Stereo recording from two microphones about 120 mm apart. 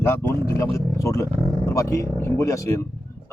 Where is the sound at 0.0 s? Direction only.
20° left (ahead or behind).